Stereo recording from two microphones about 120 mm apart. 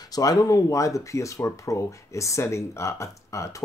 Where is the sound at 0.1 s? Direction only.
30° left (ahead or behind).